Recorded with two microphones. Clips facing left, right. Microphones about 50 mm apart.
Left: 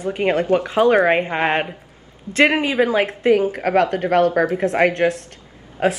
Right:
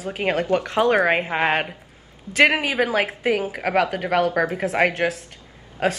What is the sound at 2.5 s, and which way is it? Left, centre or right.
A woman's voice, centre.